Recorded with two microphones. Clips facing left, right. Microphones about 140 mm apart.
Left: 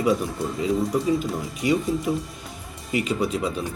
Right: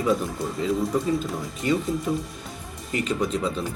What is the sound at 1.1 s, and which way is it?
Speech, 10° left (ahead or behind).